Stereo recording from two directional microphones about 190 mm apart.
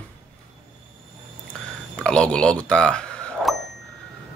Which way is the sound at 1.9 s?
5° left (ahead or behind).